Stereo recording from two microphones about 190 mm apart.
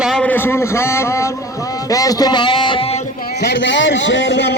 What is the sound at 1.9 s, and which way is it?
Music, 20° left (ahead or behind).